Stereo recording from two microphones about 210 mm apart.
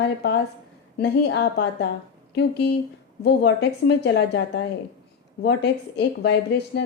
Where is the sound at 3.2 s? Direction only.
55° left (ahead or behind).